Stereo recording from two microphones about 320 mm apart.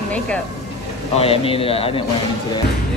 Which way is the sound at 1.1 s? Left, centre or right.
Centre.